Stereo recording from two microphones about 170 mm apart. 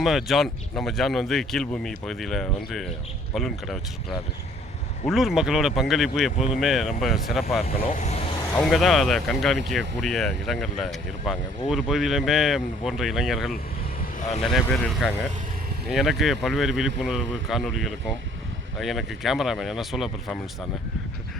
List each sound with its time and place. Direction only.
0.0 s speech: centre (ahead or behind)
5.0 s speech: centre (ahead or behind)
7.9 s speech: 40° left (ahead or behind)
8.5 s speech: 5° left (ahead or behind)
14.5 s speech: 5° left (ahead or behind)